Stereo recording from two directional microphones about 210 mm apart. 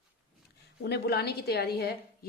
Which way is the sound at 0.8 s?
50° left (ahead or behind).